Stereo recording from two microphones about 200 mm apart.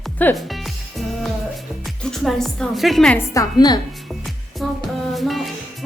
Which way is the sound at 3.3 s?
20° left (ahead or behind).